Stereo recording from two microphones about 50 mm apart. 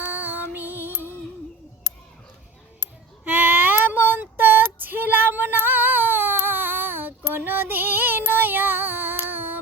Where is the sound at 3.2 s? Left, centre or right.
Right.